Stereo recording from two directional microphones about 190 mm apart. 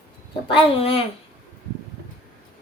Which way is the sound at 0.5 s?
30° left (ahead or behind).